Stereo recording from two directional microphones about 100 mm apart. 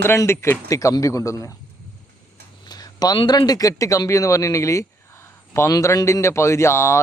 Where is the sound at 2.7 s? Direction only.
40° left (ahead or behind).